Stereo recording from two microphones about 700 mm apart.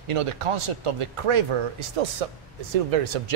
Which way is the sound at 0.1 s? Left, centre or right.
Right.